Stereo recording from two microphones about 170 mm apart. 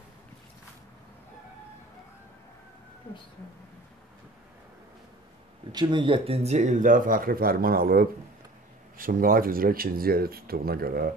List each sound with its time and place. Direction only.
5.7 s speech: 25° right (ahead or behind); by 11.1 s 60° right (ahead or behind)